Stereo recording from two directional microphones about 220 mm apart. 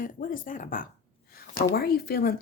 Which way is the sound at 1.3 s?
40° left (ahead or behind).